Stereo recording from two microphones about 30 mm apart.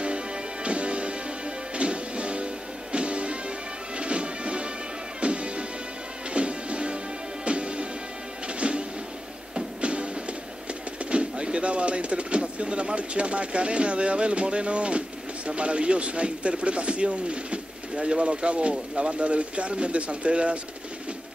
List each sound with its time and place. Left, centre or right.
0.7 s music: right
11.1 s speech: right